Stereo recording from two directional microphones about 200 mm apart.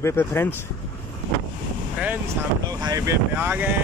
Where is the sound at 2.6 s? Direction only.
20° right (ahead or behind).